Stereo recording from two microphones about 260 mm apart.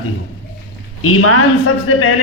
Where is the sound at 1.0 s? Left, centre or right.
Left.